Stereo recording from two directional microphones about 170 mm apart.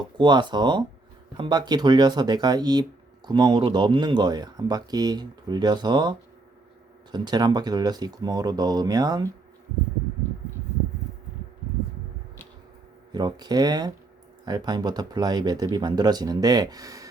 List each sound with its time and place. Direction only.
0.2 s speech: 25° right (ahead or behind)
13.1 s speech: 25° right (ahead or behind)